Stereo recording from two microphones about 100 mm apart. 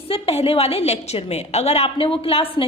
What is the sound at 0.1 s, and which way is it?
A woman's voice, 75° left (ahead or behind).